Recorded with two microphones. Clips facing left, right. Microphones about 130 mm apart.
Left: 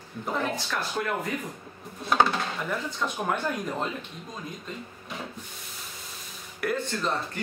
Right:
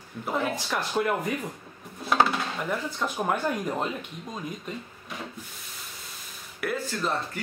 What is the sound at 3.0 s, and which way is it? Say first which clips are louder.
Speech: right 2 dB; 5° right (ahead or behind).